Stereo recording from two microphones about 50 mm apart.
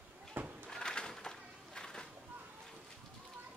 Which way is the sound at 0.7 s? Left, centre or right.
Centre.